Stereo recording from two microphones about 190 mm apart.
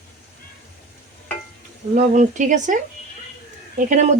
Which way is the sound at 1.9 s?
40° right (ahead or behind).